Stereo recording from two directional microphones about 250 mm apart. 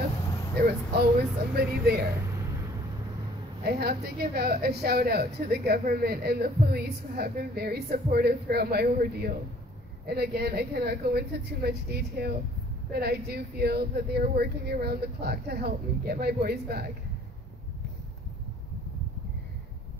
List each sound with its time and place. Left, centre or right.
0.6 s speech: right
3.6 s a woman's voice: right